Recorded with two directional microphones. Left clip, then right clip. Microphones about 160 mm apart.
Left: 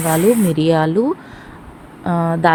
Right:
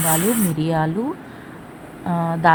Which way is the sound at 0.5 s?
35° left (ahead or behind).